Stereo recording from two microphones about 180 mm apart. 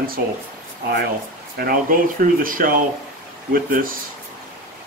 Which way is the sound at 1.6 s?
50° right (ahead or behind).